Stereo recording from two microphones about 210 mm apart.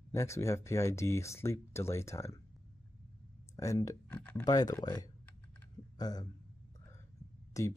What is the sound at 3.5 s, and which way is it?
Speech, 15° left (ahead or behind).